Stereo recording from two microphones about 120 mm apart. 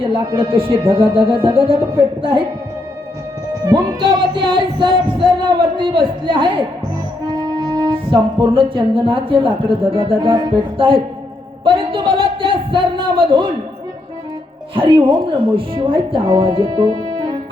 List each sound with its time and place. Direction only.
0.3 s speech: 45° right (ahead or behind)
3.7 s speech: 40° right (ahead or behind)
7.3 s music: 35° right (ahead or behind)
7.9 s speech: 45° right (ahead or behind)
11.6 s a sound: 45° right (ahead or behind)
14.8 s speech: 45° right (ahead or behind)